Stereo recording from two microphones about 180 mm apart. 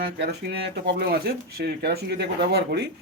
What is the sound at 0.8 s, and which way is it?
Speech, 60° right (ahead or behind).